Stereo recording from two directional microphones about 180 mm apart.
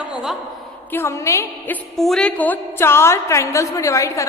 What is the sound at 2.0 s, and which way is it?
A woman's voice, centre (ahead or behind).